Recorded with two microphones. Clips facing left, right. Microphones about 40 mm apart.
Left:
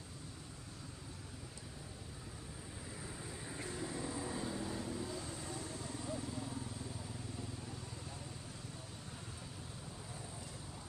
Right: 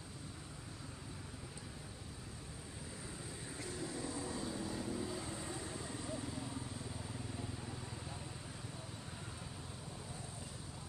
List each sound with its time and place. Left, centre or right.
4.3 s vehicle: centre